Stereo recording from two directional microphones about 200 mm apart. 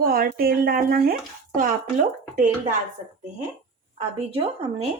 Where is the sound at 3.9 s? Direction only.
25° right (ahead or behind).